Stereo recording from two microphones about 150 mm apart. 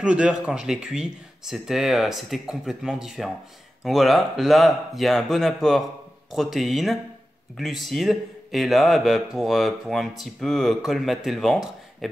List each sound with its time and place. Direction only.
0.0 s speech: 5° right (ahead or behind)